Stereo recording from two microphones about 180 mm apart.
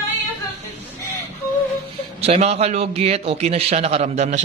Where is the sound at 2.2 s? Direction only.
35° right (ahead or behind).